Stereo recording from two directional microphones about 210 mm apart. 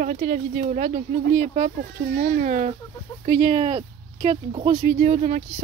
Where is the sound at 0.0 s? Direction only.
40° right (ahead or behind).